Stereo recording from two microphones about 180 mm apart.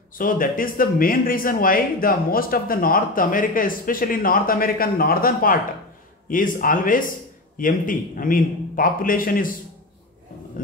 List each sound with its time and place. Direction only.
0.2 s speech: 50° left (ahead or behind)